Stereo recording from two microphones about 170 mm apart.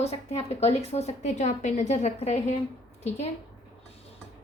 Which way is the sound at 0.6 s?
35° left (ahead or behind).